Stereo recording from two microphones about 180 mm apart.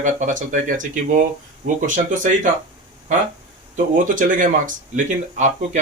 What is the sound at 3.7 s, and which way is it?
Speech, 45° right (ahead or behind).